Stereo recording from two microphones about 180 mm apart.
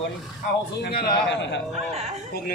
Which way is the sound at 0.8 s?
65° left (ahead or behind).